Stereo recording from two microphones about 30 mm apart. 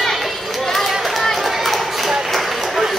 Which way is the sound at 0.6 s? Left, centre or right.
Centre.